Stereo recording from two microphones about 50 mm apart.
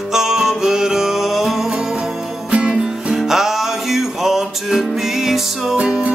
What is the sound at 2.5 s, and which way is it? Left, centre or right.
Music, right.